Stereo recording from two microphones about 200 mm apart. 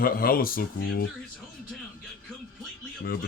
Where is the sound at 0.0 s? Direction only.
45° left (ahead or behind).